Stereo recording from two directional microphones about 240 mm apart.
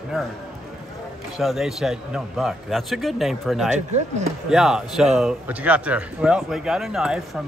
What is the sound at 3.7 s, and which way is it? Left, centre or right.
Speech, right.